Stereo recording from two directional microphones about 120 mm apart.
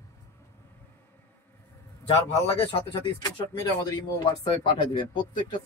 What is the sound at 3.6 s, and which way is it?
A man's voice, 35° left (ahead or behind).